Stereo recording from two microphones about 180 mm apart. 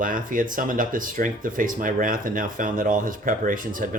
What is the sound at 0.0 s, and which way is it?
Speech, 50° right (ahead or behind).